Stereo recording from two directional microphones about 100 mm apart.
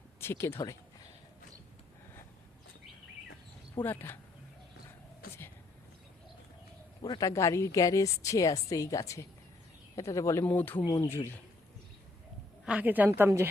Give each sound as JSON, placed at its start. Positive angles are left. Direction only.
{"t": 0.2, "sound": "speech", "side_deg": 25}
{"t": 3.8, "sound": "speech", "side_deg": 20}
{"t": 7.0, "sound": "speech", "side_deg": 40}
{"t": 10.4, "sound": "speech", "side_deg": 20}
{"t": 12.6, "sound": "a woman's voice", "side_deg": -15}